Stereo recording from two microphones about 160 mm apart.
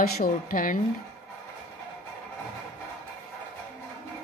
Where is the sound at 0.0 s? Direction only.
60° left (ahead or behind).